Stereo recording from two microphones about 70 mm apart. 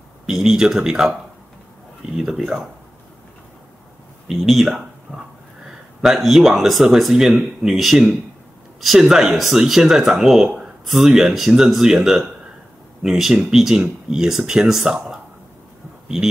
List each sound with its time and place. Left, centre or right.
0.3 s speech: centre
2.1 s speech: centre
4.3 s speech: centre
5.1 s a sound: right
5.9 s speech: centre